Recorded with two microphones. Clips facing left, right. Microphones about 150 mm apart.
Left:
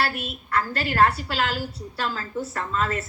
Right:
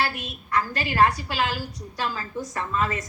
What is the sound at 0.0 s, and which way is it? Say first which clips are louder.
A woman's voice: left 1 dB; 15° right (ahead or behind).